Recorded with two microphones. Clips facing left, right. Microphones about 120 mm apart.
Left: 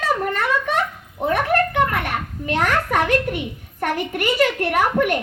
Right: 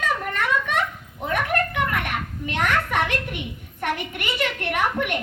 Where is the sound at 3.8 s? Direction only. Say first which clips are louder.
Left 5 dB; 40° left (ahead or behind).